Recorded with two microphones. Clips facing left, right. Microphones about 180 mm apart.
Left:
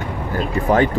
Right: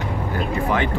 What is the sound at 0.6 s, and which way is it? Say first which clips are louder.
Speech: left 6 dB; 40° left (ahead or behind).